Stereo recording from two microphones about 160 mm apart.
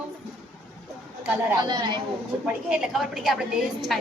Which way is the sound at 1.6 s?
30° right (ahead or behind).